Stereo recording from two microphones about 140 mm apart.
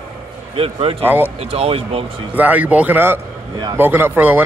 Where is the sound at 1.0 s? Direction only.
15° right (ahead or behind).